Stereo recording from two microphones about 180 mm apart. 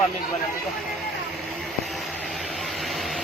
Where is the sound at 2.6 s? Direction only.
Centre (ahead or behind).